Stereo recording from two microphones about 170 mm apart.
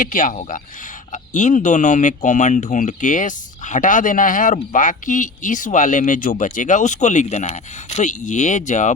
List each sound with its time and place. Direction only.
0.0 s speech: 50° left (ahead or behind)